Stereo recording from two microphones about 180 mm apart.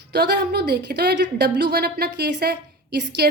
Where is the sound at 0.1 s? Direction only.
65° right (ahead or behind).